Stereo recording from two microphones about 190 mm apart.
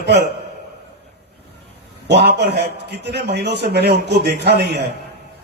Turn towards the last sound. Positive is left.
turn(degrees=-60)  # may be behind; listen again after turning